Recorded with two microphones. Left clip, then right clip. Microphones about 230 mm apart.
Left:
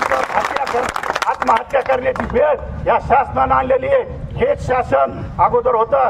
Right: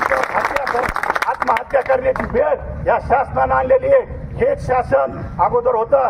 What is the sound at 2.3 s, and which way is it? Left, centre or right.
A man's voice, left.